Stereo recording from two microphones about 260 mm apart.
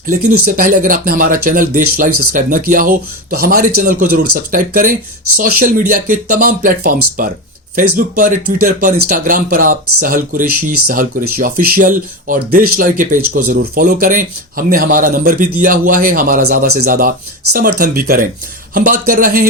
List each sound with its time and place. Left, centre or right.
0.4 s speech: right